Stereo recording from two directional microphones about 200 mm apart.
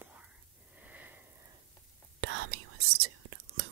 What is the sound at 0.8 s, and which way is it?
Sniff, 5° right (ahead or behind).